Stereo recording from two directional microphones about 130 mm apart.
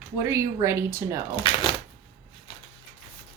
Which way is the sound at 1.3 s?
40° left (ahead or behind).